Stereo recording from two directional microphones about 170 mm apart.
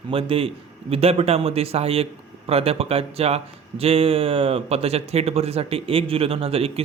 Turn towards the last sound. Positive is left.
turn(degrees=-35)  # may be behind; listen again after turning